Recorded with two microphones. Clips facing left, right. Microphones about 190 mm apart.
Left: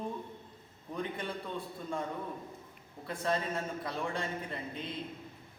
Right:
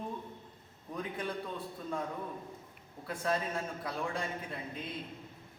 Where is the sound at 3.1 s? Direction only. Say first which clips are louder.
Left 1 dB; centre (ahead or behind).